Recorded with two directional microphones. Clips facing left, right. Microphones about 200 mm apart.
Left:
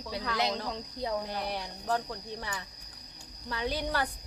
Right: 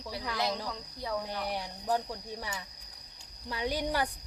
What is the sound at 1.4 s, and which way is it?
Speech, 15° right (ahead or behind).